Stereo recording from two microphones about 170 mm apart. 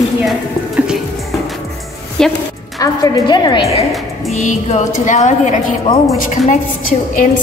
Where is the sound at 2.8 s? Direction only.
25° left (ahead or behind).